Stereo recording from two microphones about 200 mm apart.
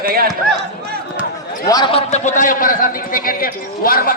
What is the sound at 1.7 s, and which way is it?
A man's voice, 20° left (ahead or behind).